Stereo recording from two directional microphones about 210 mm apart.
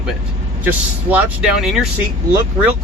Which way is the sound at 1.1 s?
5° right (ahead or behind).